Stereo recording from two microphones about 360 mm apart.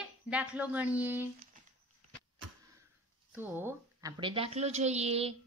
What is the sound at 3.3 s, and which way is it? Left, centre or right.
A woman's voice, centre.